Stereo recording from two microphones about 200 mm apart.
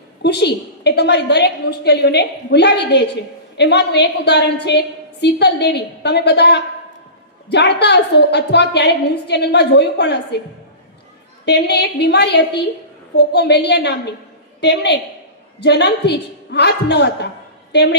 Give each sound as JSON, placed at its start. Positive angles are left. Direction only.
{"t": 0.2, "sound": "a woman's voice", "side_deg": 55}
{"t": 11.4, "sound": "a woman's voice", "side_deg": 55}